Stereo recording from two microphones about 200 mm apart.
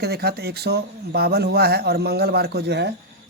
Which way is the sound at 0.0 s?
55° right (ahead or behind).